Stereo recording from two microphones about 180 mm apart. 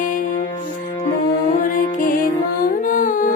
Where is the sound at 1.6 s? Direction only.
50° left (ahead or behind).